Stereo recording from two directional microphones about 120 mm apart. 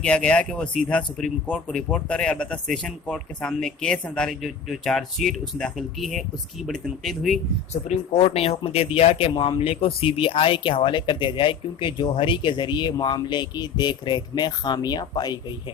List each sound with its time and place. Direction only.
0.0 s a man's voice: 10° left (ahead or behind)
7.7 s speech: 65° left (ahead or behind); by 15.4 s 35° left (ahead or behind)